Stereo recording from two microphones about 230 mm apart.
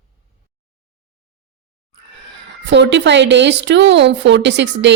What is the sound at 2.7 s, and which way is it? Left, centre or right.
A woman's voice, right.